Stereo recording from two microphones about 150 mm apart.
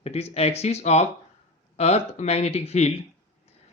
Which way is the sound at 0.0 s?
45° left (ahead or behind).